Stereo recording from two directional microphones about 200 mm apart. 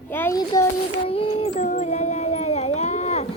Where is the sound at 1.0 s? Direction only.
25° left (ahead or behind).